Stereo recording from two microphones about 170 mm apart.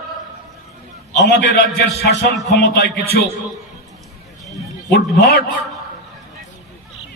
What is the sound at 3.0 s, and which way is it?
Speech, 65° left (ahead or behind).